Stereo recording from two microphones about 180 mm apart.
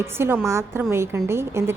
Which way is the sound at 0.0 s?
15° right (ahead or behind).